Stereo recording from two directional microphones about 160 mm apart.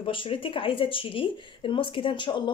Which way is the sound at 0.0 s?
35° left (ahead or behind).